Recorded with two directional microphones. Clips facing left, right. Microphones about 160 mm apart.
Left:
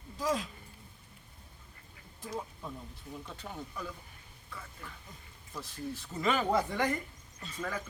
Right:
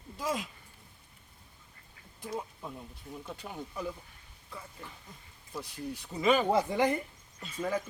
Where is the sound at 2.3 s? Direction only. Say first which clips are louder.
Right 1 dB; 10° right (ahead or behind).